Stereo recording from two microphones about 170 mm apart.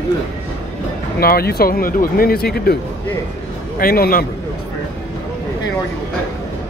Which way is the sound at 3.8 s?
60° left (ahead or behind).